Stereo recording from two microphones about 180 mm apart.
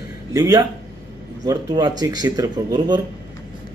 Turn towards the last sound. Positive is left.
turn(degrees=-25)  # may be behind; listen again after turning